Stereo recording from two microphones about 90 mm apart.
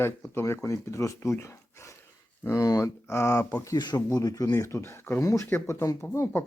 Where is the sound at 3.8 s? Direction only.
55° left (ahead or behind).